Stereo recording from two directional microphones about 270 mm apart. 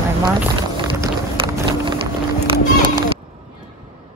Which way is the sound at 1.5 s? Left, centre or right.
Centre.